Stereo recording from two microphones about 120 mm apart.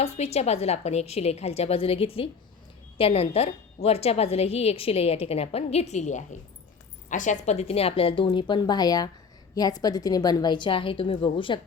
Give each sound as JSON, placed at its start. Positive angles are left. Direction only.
{"t": 0.0, "sound": "a woman's voice", "side_deg": 60}
{"t": 7.1, "sound": "a woman's voice", "side_deg": 90}